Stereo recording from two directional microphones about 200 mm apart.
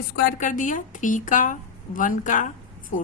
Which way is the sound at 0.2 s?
40° left (ahead or behind).